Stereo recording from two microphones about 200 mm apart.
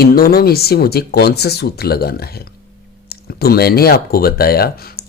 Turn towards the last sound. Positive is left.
turn(degrees=50)  # may be behind; listen again after turning